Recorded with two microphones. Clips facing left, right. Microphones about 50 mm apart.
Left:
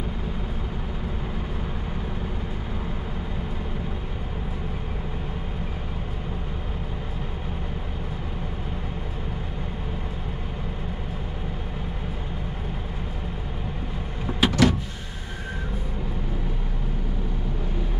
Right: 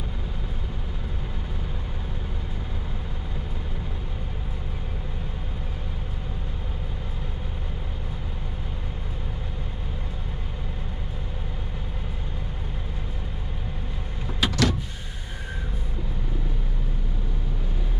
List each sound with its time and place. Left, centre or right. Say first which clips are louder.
14.4 s power windows: left 4 dB; centre